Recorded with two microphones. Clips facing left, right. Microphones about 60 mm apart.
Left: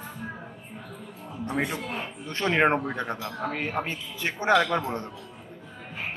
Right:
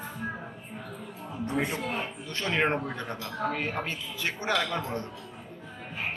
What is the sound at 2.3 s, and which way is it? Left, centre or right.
Speech, left.